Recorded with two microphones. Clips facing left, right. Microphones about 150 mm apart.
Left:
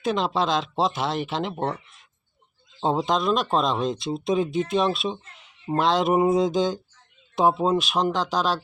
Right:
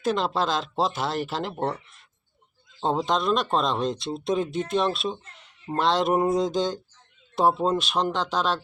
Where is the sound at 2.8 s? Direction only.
5° left (ahead or behind).